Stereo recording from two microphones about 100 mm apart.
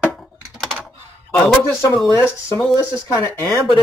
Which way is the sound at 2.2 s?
25° left (ahead or behind).